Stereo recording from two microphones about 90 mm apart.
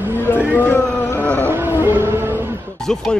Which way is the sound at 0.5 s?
25° left (ahead or behind).